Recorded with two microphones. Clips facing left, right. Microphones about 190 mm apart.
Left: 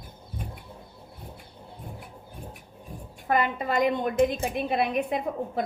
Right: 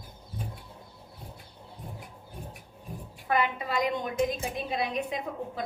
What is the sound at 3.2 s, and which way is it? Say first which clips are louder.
A woman's voice: left 3 dB; 45° left (ahead or behind).